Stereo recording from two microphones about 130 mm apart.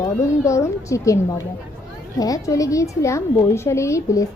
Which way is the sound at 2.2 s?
25° left (ahead or behind).